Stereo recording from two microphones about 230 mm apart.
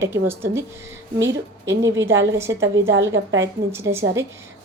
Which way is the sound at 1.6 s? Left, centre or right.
Right.